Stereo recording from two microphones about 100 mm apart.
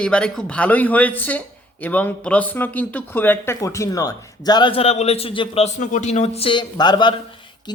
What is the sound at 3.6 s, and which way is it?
Speech, 30° left (ahead or behind).